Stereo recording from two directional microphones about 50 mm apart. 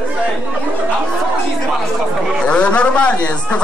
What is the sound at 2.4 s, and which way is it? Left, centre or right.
A man's voice, left.